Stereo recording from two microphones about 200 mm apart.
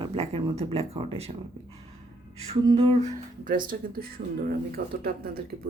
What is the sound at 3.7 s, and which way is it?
Speech, 45° right (ahead or behind).